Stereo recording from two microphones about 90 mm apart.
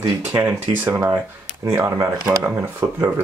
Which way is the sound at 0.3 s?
20° right (ahead or behind).